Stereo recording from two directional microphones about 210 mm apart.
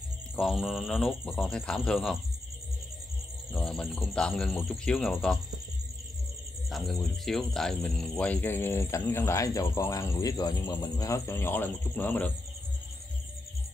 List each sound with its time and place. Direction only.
0.4 s speech: centre (ahead or behind)
3.5 s speech: centre (ahead or behind)
6.7 s speech: centre (ahead or behind)